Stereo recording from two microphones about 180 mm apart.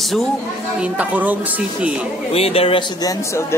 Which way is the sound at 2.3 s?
35° left (ahead or behind).